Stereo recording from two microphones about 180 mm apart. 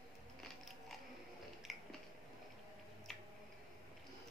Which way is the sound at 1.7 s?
Centre (ahead or behind).